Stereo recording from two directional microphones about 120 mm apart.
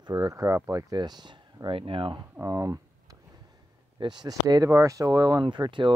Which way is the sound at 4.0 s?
35° right (ahead or behind).